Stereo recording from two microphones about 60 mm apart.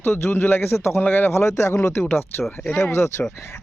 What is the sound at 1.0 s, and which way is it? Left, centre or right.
Speech, left.